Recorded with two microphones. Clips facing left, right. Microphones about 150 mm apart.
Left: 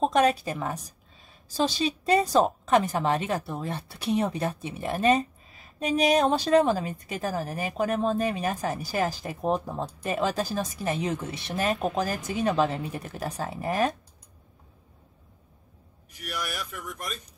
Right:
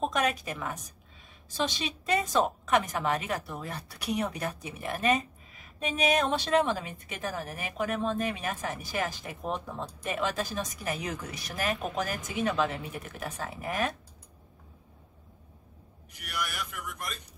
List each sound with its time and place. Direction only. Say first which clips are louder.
0.0 s a woman's voice: left 7 dB; 30° left (ahead or behind)